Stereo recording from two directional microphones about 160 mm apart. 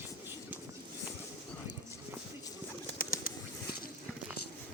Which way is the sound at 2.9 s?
60° left (ahead or behind).